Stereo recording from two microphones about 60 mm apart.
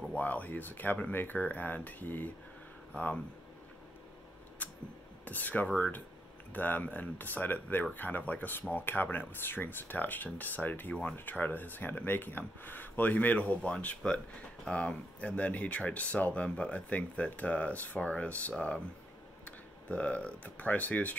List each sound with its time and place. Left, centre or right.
0.1 s speech: left
4.6 s a sound: left
5.2 s speech: left
19.9 s speech: left